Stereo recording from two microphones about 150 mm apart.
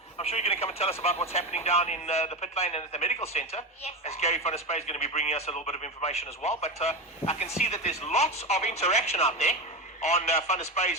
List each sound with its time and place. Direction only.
0.2 s speech: 45° left (ahead or behind)